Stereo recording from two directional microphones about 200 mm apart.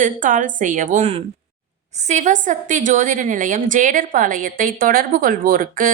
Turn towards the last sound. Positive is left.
turn(degrees=-45)  # may be behind; listen again after turning